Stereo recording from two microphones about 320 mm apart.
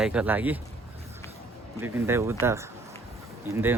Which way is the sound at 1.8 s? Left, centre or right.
Centre.